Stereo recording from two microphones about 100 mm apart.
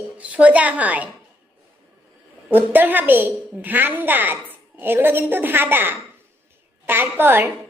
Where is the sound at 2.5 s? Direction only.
20° right (ahead or behind).